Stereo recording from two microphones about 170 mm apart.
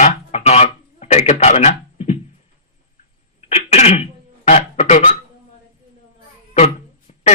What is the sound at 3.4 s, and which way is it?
Throat clearing, 40° left (ahead or behind).